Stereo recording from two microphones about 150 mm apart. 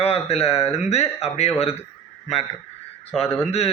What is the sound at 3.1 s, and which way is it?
Speech, 45° left (ahead or behind).